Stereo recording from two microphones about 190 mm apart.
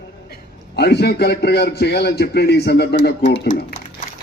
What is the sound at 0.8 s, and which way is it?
A man's voice, 60° left (ahead or behind).